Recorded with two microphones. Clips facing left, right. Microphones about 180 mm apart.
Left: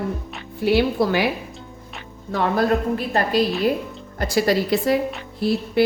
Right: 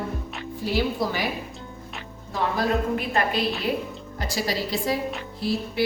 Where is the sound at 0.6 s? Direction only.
65° left (ahead or behind).